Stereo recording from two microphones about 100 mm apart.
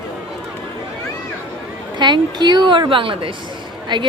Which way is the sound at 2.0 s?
45° right (ahead or behind).